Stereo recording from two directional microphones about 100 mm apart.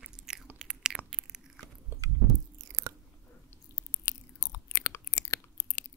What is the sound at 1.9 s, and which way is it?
Biting, 20° right (ahead or behind).